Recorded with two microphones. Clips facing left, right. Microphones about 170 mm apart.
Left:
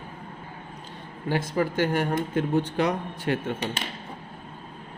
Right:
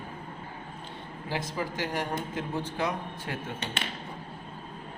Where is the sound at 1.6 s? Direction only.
60° left (ahead or behind).